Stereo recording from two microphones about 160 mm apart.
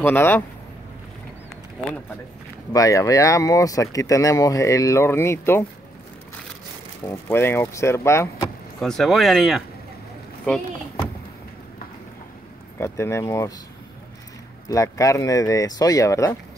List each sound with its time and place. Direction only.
0.0 s speech: 15° left (ahead or behind)
2.7 s speech: 20° left (ahead or behind)
7.1 s speech: 15° left (ahead or behind)
8.8 s speech: centre (ahead or behind)
12.7 s speech: 15° left (ahead or behind)
14.7 s speech: 20° left (ahead or behind)